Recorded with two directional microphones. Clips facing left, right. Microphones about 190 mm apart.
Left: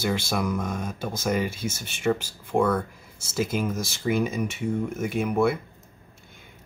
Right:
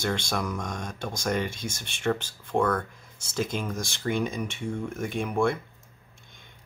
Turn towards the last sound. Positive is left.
turn(degrees=5)  # may be behind; listen again after turning